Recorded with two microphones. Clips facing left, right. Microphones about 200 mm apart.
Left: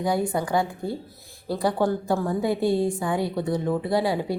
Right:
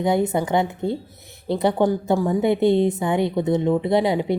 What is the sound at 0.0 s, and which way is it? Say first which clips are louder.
Speech: right 4 dB; 20° right (ahead or behind).